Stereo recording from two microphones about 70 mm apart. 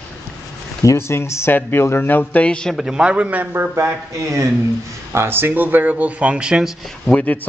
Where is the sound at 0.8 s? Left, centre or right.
Left.